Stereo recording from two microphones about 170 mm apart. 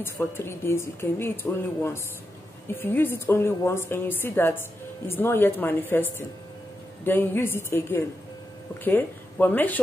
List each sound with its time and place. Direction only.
0.0 s a woman's voice: 15° left (ahead or behind)